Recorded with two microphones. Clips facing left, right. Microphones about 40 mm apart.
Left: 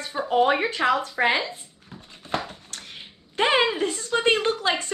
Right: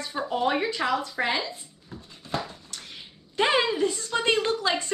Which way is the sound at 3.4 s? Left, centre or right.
Left.